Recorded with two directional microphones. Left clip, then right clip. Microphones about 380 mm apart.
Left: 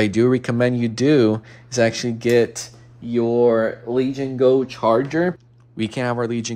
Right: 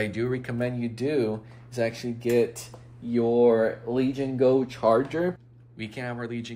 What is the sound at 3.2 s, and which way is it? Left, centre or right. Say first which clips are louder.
Speech: left 4 dB; left.